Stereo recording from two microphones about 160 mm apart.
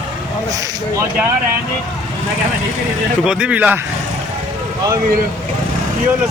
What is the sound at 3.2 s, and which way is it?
Speech, 5° right (ahead or behind).